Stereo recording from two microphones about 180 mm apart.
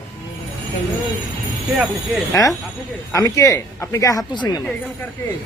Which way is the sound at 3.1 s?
15° left (ahead or behind).